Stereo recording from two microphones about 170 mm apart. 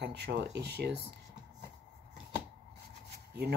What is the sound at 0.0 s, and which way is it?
Speech, 80° right.